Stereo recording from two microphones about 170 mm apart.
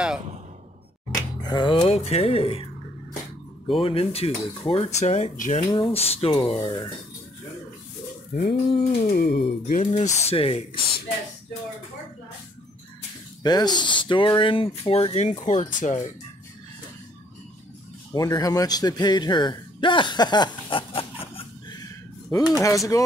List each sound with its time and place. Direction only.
1.4 s speech: 25° left (ahead or behind)
3.6 s speech: 30° left (ahead or behind)
5.6 s speech: 25° left (ahead or behind)
8.4 s speech: 35° left (ahead or behind)
9.1 s speech: 70° left (ahead or behind)
9.9 s speech: 30° left (ahead or behind)
13.4 s speech: 25° left (ahead or behind); by 16.0 s 45° left (ahead or behind)
18.1 s speech: 20° left (ahead or behind)
22.3 s speech: 20° left (ahead or behind)